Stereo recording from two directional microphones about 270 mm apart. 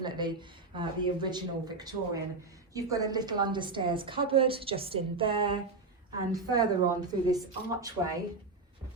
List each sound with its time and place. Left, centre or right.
0.0 s a woman's voice: centre